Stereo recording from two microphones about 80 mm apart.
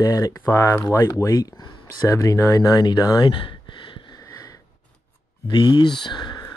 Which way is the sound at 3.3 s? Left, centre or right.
Left.